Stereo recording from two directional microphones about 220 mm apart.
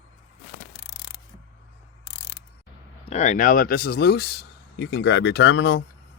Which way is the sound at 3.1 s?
30° left (ahead or behind).